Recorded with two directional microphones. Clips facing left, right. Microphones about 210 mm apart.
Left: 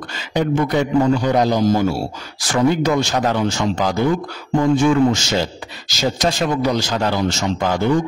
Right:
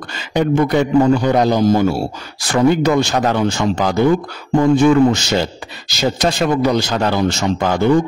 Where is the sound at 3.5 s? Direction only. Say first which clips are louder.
Right 2 dB; 60° right (ahead or behind).